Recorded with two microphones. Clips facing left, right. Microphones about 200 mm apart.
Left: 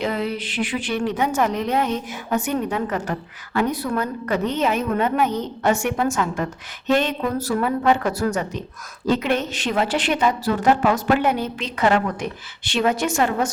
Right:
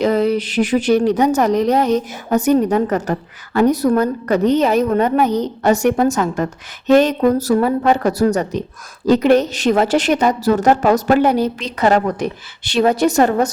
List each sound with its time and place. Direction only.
0.0 s a woman's voice: 40° right (ahead or behind)